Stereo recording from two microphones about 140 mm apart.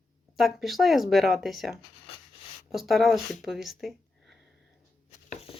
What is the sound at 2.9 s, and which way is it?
Speech, centre (ahead or behind).